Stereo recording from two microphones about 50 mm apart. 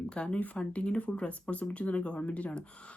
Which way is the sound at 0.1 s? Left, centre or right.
Left.